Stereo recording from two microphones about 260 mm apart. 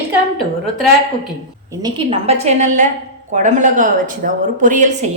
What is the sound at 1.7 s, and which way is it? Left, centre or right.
Speech, centre.